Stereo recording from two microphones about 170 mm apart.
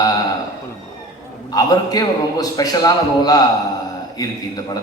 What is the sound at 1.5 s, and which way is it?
A man's voice, 20° left (ahead or behind).